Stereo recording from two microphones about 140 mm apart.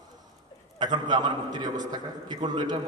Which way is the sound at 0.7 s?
30° right (ahead or behind).